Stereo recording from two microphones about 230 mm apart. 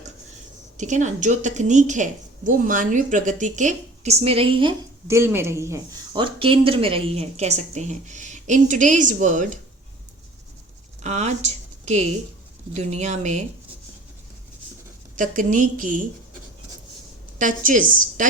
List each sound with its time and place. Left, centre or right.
0.8 s a woman's voice: right
11.0 s speech: right
15.1 s a woman's voice: right
17.3 s a woman's voice: right